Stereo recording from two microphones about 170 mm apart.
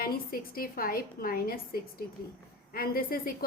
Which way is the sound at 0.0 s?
60° left (ahead or behind).